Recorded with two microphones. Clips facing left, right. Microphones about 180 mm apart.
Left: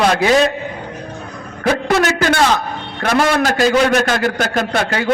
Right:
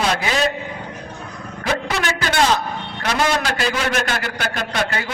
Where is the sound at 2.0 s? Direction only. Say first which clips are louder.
Left 5 dB; 45° left (ahead or behind).